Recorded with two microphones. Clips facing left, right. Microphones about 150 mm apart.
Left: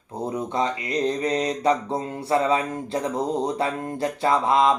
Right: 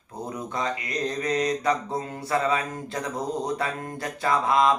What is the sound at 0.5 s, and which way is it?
Mantra, 25° left (ahead or behind).